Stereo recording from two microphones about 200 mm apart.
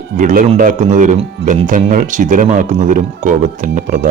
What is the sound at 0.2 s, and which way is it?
Speech, 40° right (ahead or behind).